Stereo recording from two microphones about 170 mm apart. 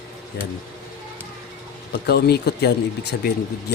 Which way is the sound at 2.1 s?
70° left (ahead or behind).